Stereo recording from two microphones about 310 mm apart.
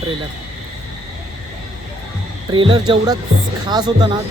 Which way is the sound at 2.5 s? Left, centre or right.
Centre.